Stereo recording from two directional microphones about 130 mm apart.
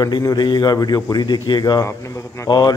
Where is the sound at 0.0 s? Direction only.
30° left (ahead or behind).